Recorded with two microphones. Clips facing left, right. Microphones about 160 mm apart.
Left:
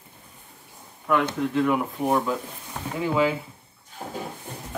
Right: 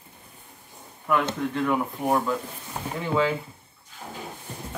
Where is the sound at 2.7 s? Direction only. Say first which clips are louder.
Even; 15° right (ahead or behind).